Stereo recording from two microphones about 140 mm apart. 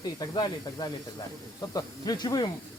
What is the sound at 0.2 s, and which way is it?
Speech, 30° left (ahead or behind).